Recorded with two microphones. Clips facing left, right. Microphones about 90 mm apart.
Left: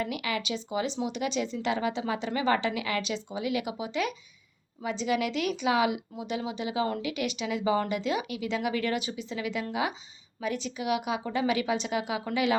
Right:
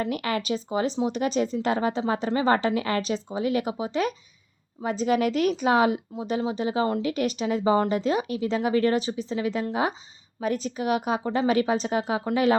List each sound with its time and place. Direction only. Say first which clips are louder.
0.0 s a woman's voice: right 4 dB; 45° right (ahead or behind)